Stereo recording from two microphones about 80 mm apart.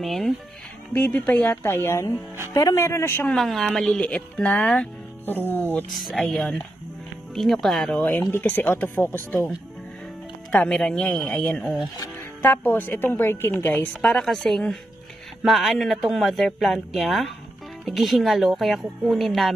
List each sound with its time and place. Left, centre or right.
0.0 s speech: centre
0.9 s speech: centre; by 2.1 s left
2.5 s a man's voice: left
2.8 s a man's voice: left
3.3 s speech: centre
4.0 s speech: centre
5.9 s speech: centre
8.2 s speech: left
10.5 s speech: centre
12.7 s speech: left
14.2 s speech: centre